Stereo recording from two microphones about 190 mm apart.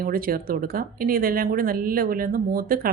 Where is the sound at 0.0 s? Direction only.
50° right (ahead or behind).